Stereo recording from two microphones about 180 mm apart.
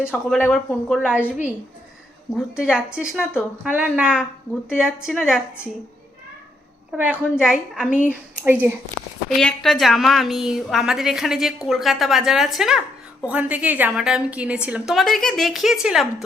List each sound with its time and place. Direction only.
0.0 s a woman's voice: 5° right (ahead or behind)
0.3 s a woman's voice: 10° left (ahead or behind)
6.9 s a woman's voice: 10° right (ahead or behind)
9.4 s a woman's voice: 5° left (ahead or behind)